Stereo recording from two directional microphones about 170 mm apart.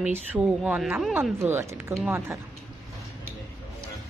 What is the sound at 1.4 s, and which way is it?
Speech, 15° right (ahead or behind).